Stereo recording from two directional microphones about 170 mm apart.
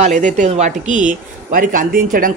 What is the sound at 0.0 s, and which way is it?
Speech, 45° right (ahead or behind).